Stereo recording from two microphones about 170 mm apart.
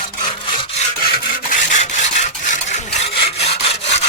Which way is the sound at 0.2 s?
25° left (ahead or behind).